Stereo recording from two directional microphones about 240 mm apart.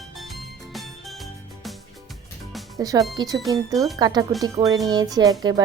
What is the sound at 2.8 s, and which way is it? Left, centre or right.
Speech, centre.